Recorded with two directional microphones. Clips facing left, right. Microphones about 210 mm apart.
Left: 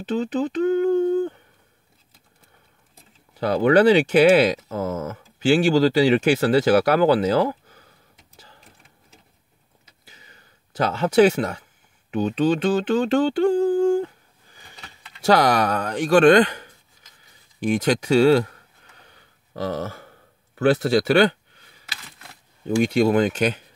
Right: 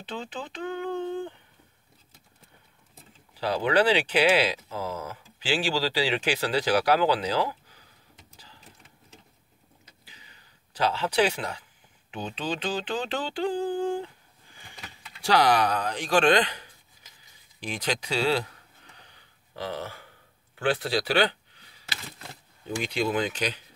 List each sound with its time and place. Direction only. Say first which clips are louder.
0.1 s a sound: left 13 dB; 40° left (ahead or behind)
3.3 s speech: left 7 dB; 50° left (ahead or behind)
10.0 s a sound: left 8 dB; 50° left (ahead or behind)
12.1 s mantra: left 12 dB; 45° left (ahead or behind)
15.2 s speech: left 4 dB; 45° left (ahead or behind)
17.6 s speech: left 11 dB; 50° left (ahead or behind)
19.5 s speech: left 7 dB; 45° left (ahead or behind)
22.8 s speech: left 9 dB; 45° left (ahead or behind)